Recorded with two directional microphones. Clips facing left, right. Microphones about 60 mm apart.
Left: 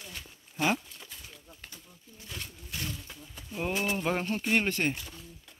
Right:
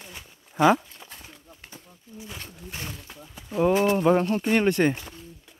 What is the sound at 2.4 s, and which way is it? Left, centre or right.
Speech, right.